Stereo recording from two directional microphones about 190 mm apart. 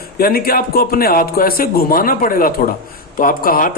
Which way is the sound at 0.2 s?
50° left (ahead or behind).